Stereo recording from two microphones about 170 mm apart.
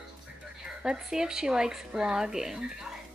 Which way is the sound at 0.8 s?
5° right (ahead or behind).